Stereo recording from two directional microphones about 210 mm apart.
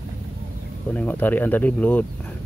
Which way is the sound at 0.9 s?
5° left (ahead or behind).